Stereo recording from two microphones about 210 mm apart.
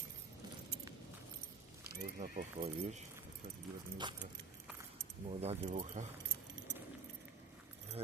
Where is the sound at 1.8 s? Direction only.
50° right (ahead or behind).